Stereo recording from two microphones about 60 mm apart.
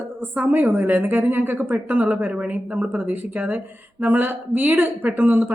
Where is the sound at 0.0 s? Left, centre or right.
Right.